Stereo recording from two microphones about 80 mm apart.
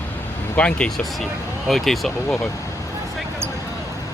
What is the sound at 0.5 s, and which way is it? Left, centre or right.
Speech, centre.